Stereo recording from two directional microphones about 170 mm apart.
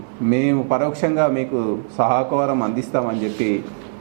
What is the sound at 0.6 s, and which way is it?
Speech, 15° right (ahead or behind).